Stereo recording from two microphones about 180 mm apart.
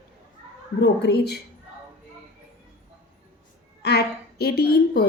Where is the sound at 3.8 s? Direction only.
65° left (ahead or behind).